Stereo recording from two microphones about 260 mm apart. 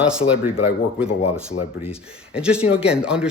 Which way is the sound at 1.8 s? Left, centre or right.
Centre.